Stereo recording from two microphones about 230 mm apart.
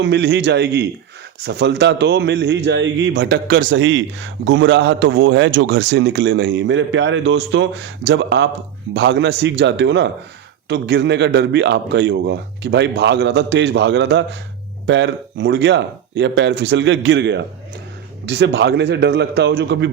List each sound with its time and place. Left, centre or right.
0.0 s a man's voice: right